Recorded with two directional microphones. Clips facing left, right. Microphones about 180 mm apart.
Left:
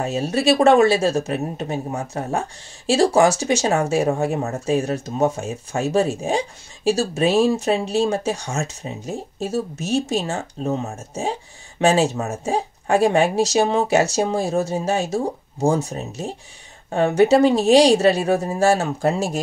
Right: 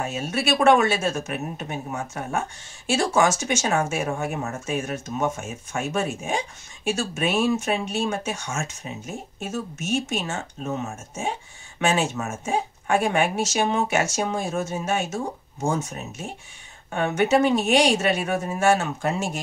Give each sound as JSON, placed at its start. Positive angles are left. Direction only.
{"t": 0.0, "sound": "speech", "side_deg": 35}